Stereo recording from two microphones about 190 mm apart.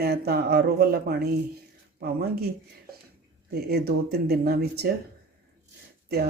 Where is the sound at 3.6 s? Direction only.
55° right (ahead or behind).